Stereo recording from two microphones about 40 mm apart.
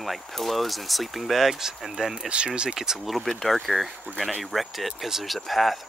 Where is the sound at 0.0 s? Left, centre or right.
Centre.